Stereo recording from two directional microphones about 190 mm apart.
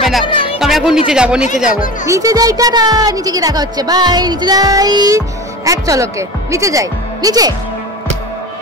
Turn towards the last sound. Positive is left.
turn(degrees=-20)  # may be behind; listen again after turning